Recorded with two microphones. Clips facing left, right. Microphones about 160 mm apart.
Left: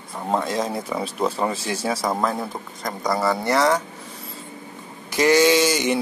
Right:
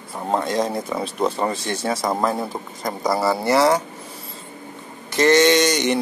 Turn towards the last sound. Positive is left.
turn(degrees=5)  # may be behind; listen again after turning